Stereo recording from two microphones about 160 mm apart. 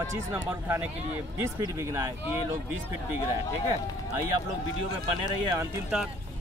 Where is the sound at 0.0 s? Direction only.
15° right (ahead or behind).